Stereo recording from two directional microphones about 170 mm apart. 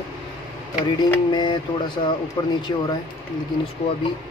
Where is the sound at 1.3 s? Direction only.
25° left (ahead or behind).